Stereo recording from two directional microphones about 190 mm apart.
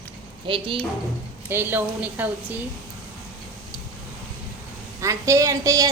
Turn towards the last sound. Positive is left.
turn(degrees=-15)  # may be behind; listen again after turning